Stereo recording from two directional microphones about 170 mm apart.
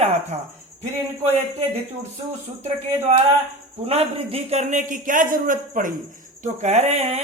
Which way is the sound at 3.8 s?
35° right (ahead or behind).